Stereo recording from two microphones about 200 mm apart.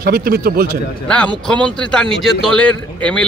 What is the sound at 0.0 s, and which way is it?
Speech, 50° right (ahead or behind).